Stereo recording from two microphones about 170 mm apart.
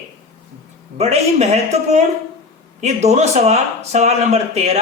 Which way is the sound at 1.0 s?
40° right (ahead or behind).